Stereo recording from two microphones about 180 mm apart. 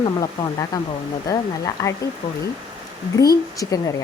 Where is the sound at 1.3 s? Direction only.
20° left (ahead or behind).